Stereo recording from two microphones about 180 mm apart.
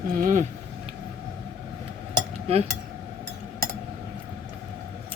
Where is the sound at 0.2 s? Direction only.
45° right (ahead or behind).